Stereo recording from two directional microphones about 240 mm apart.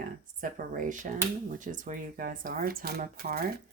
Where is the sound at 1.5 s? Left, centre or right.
Right.